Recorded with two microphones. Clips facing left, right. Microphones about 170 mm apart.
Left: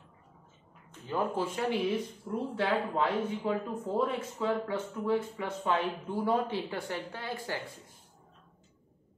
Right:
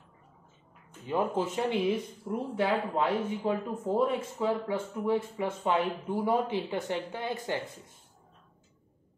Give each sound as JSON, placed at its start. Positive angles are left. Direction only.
{"t": 1.0, "sound": "speech", "side_deg": -15}